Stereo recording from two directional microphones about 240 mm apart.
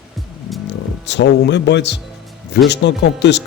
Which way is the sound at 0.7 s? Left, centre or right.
Left.